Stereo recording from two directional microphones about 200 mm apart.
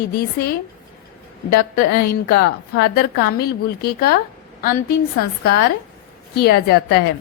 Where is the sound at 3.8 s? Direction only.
50° left (ahead or behind).